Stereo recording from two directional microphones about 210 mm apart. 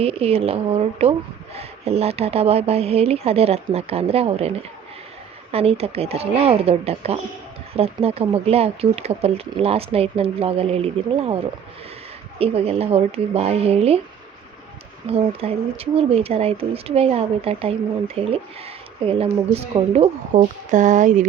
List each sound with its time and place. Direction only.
0.0 s speech: 30° right (ahead or behind)
12.4 s speech: 30° right (ahead or behind)
15.0 s a woman's voice: 30° right (ahead or behind)